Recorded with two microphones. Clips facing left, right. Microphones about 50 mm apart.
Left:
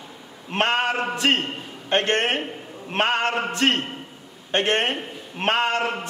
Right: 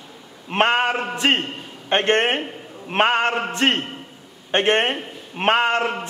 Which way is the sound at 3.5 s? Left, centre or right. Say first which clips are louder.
Right 1 dB; right.